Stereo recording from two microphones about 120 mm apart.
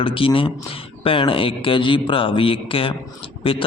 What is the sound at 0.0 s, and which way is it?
Speech, 45° left (ahead or behind).